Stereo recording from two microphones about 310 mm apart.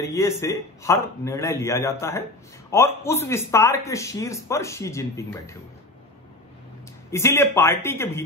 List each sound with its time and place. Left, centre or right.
0.0 s a man's voice: centre
7.1 s a man's voice: centre